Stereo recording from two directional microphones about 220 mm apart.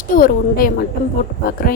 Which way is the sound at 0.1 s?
40° left (ahead or behind).